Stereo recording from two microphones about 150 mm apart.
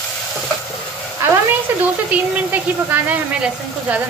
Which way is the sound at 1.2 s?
10° right (ahead or behind).